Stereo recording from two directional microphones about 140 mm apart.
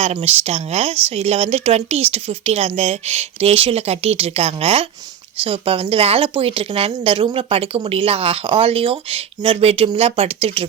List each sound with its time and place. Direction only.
0.2 s a woman's voice: 45° right (ahead or behind)